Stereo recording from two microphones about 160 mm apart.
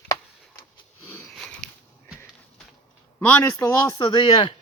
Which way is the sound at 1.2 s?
Centre (ahead or behind).